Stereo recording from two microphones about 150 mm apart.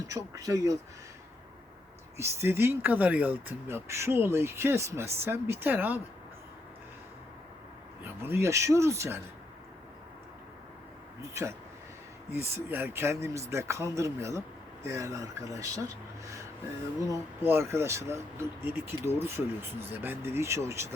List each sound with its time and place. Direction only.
0.0 s speech: 20° right (ahead or behind)
2.1 s speech: 15° right (ahead or behind)
8.0 s speech: 15° right (ahead or behind)
12.3 s speech: 15° right (ahead or behind)